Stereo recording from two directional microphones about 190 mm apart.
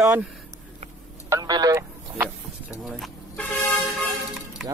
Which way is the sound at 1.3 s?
20° right (ahead or behind).